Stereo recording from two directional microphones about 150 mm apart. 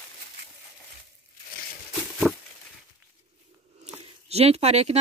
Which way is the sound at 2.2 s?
Centre (ahead or behind).